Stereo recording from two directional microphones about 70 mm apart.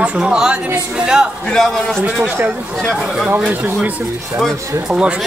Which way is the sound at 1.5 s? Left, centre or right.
Centre.